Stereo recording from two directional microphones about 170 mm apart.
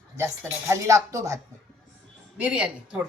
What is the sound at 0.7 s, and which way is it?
Speech, 15° right (ahead or behind).